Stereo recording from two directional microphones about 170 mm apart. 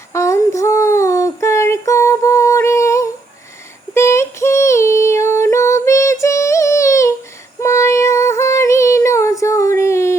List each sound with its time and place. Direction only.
0.1 s child singing: 15° left (ahead or behind)
3.9 s female singing: 15° left (ahead or behind)